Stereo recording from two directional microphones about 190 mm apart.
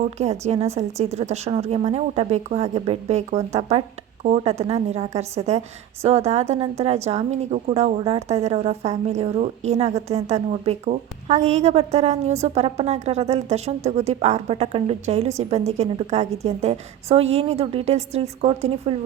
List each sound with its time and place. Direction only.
0.0 s a woman's voice: 35° right (ahead or behind)